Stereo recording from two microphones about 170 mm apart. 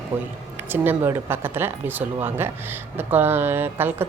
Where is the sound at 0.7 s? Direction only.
15° right (ahead or behind).